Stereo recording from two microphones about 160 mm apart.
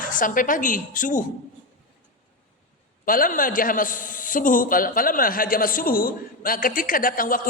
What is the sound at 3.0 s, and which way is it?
A man's voice, 60° left (ahead or behind).